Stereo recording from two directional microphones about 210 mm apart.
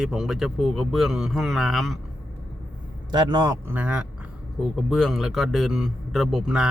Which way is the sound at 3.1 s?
20° right (ahead or behind).